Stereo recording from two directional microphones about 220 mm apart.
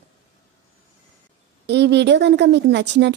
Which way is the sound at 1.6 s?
50° right (ahead or behind).